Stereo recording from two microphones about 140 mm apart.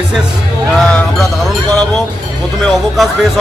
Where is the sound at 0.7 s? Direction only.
Centre (ahead or behind).